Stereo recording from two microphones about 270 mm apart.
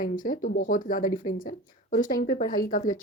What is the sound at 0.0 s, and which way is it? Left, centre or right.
Speech, left.